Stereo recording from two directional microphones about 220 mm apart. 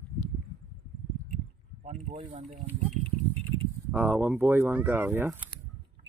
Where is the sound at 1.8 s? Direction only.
30° right (ahead or behind).